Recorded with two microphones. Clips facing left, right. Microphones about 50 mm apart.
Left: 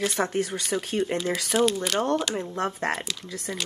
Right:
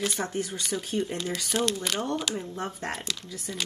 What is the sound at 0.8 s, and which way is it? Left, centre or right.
Speech, left.